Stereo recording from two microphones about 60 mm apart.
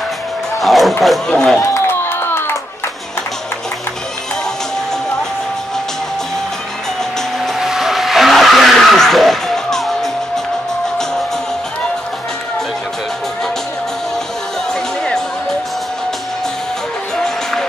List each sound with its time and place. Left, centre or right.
0.6 s music: centre
1.0 s speech: centre
1.9 s a sound: left
7.6 s vehicle: centre